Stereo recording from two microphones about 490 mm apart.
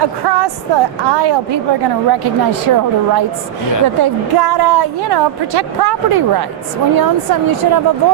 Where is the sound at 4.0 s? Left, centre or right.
Right.